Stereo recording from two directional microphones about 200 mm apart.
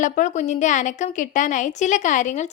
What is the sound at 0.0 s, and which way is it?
A woman's voice, 40° left (ahead or behind).